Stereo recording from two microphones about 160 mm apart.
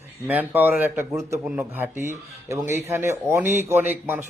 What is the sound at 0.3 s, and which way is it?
A man's voice, 10° right (ahead or behind).